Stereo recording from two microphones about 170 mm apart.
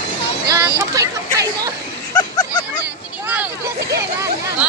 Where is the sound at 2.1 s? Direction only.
25° left (ahead or behind).